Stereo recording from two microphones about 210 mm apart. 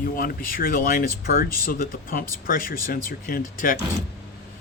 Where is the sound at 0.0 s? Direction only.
45° left (ahead or behind).